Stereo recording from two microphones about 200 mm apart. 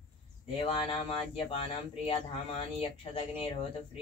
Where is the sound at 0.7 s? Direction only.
25° left (ahead or behind).